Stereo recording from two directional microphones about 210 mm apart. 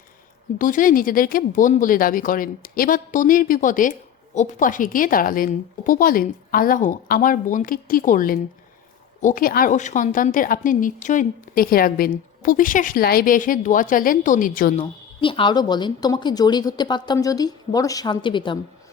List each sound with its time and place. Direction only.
0.6 s speech: 40° left (ahead or behind)
15.2 s a woman's voice: 25° left (ahead or behind)